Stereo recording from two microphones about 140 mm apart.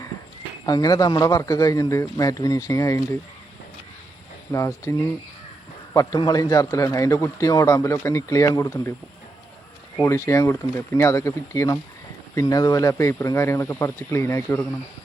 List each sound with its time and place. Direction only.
0.6 s a man's voice: 30° left (ahead or behind)
4.5 s a man's voice: 20° left (ahead or behind)
10.0 s a man's voice: 20° left (ahead or behind)